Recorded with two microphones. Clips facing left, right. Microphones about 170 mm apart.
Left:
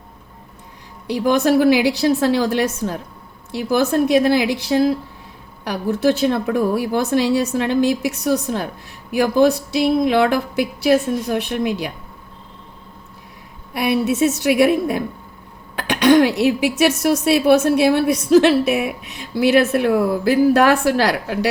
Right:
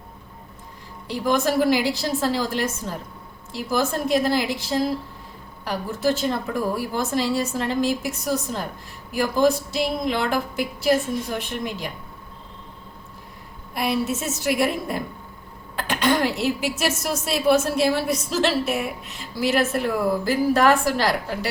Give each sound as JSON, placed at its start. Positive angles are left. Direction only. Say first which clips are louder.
{"t": 1.0, "sound": "speech", "louder": "left 5 dB", "side_deg": 70}
{"t": 13.7, "sound": "speech", "louder": "left 6 dB", "side_deg": 65}